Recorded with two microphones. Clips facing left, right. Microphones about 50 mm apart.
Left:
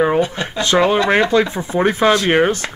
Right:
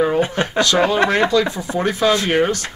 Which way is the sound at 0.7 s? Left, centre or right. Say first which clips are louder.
Left 4 dB; left.